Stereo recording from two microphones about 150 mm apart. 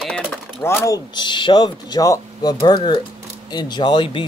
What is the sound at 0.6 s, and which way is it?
Speech, 20° left (ahead or behind).